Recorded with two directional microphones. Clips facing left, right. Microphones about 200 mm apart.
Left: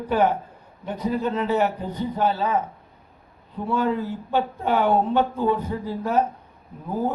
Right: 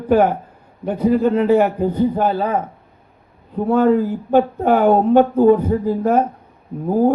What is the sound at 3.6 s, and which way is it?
Speech, 45° right (ahead or behind).